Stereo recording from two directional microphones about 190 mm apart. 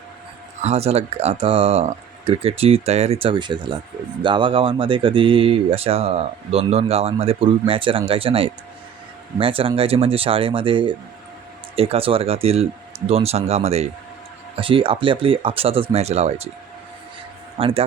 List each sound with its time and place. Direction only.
0.6 s speech: 35° right (ahead or behind)
17.6 s speech: 30° right (ahead or behind)